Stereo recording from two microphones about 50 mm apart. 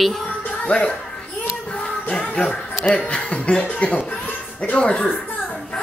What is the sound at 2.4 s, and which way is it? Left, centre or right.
Speech, left.